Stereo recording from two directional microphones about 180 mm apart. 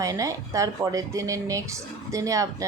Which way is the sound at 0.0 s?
20° right (ahead or behind).